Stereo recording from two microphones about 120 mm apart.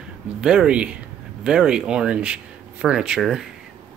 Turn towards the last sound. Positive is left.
turn(degrees=-5)  # may be behind; listen again after turning